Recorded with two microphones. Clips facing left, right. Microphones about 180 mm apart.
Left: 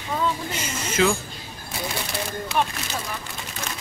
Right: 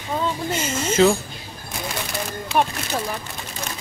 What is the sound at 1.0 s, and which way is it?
Speech, 35° right (ahead or behind).